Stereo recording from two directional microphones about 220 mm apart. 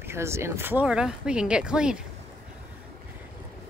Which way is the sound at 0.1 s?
10° right (ahead or behind).